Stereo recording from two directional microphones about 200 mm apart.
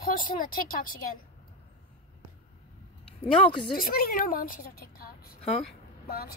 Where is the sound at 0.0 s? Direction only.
45° left (ahead or behind).